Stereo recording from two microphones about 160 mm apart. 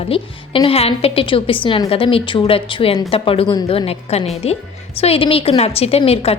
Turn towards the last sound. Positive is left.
turn(degrees=35)  # may be behind; listen again after turning